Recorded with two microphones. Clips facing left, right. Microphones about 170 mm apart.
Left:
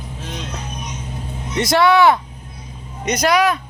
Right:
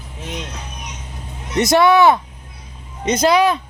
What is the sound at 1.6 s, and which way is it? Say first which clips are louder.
Speech: right 1 dB; 20° right (ahead or behind).